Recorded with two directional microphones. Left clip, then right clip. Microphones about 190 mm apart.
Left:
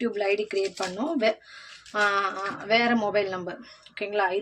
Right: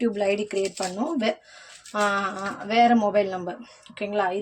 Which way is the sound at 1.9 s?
30° right (ahead or behind).